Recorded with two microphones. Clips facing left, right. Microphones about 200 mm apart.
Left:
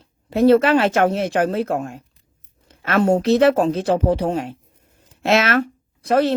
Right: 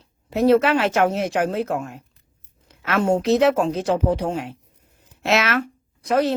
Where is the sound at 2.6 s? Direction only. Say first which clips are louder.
Left 3 dB; 55° left (ahead or behind).